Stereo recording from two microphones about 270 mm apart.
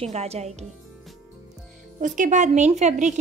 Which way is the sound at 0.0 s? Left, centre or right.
Right.